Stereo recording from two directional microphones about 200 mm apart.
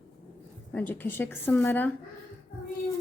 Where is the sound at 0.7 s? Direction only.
10° left (ahead or behind).